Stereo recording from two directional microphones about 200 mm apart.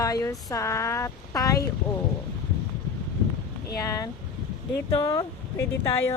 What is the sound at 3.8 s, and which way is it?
Speech, 20° left (ahead or behind).